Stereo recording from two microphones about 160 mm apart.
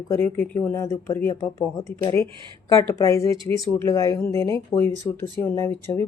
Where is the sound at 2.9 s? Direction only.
20° left (ahead or behind).